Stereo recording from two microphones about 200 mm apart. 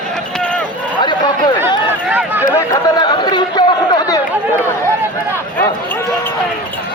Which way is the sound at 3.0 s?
20° left (ahead or behind).